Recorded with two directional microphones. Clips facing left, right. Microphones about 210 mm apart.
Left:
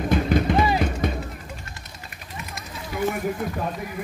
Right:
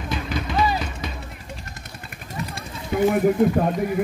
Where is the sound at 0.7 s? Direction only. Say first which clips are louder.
Left 6 dB; 55° left (ahead or behind).